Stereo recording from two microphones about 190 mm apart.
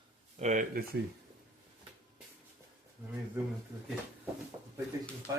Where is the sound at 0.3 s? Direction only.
40° right (ahead or behind).